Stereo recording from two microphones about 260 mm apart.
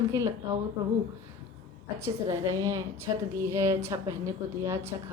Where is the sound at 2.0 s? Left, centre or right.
Centre.